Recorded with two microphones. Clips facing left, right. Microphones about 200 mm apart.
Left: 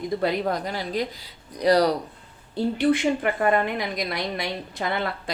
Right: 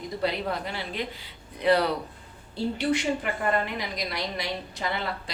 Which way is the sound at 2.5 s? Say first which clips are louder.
Left 5 dB; 50° left (ahead or behind).